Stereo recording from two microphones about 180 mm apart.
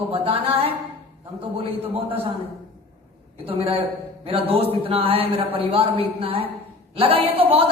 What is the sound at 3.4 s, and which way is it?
A woman's voice, 30° right (ahead or behind).